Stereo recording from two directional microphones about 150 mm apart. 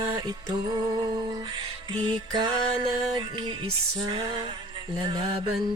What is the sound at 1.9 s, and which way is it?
Music, 30° right (ahead or behind).